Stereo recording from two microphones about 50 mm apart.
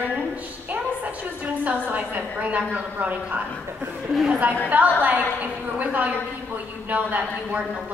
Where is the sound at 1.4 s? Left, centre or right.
Right.